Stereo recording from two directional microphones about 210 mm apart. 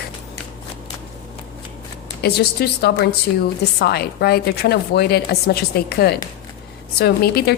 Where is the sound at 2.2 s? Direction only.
50° left (ahead or behind).